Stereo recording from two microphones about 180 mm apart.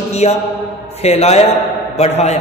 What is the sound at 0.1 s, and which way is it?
A man's voice, 35° left (ahead or behind).